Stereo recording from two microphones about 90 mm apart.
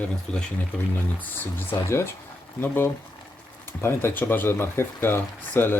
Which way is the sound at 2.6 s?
25° left (ahead or behind).